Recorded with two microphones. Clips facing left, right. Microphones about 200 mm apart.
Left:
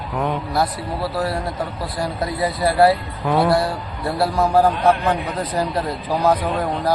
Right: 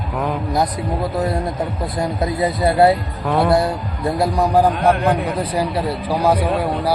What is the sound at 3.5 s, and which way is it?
Speech, 20° right (ahead or behind).